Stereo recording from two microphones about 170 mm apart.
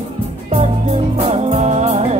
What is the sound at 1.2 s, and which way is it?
Music, 35° right (ahead or behind).